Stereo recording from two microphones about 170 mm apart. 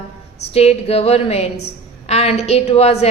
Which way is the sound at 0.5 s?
35° left (ahead or behind).